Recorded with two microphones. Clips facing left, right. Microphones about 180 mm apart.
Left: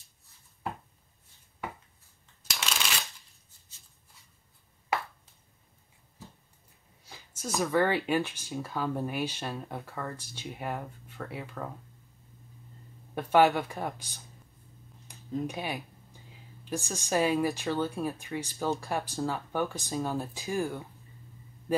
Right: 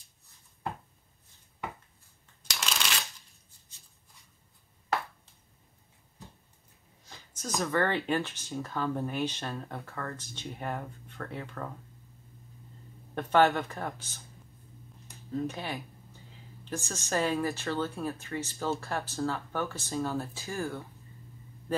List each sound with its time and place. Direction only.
7.1 s speech: 10° left (ahead or behind)
13.1 s speech: 10° left (ahead or behind)
15.3 s speech: 15° left (ahead or behind)
21.7 s a sound: 10° left (ahead or behind)